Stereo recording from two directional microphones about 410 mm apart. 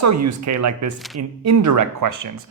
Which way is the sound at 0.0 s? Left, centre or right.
Right.